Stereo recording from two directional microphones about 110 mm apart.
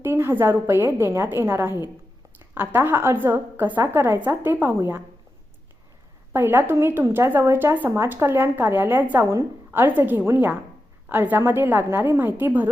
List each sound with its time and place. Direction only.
0.0 s speech: 20° right (ahead or behind)
6.3 s speech: 20° right (ahead or behind)